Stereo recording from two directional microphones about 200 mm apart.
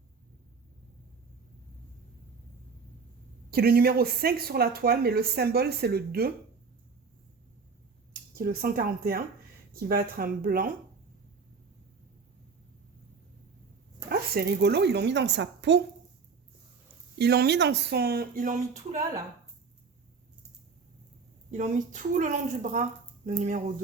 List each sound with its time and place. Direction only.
3.5 s speech: 50° right (ahead or behind)
8.4 s speech: 45° right (ahead or behind)
14.1 s a woman's voice: 55° right (ahead or behind)
17.2 s speech: 55° right (ahead or behind); by 18.9 s 35° right (ahead or behind)
21.5 s a woman's voice: 35° right (ahead or behind)